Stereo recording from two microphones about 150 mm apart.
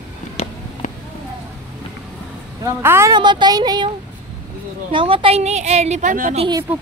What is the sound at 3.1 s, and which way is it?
Speech, 30° right (ahead or behind).